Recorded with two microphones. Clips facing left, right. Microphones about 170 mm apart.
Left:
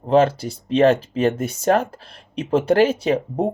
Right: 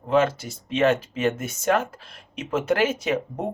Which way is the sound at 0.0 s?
35° left (ahead or behind).